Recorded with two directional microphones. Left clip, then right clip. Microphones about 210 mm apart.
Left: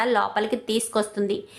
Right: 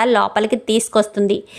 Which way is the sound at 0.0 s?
30° right (ahead or behind).